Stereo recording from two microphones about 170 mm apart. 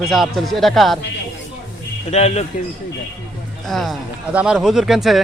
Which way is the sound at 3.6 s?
Centre (ahead or behind).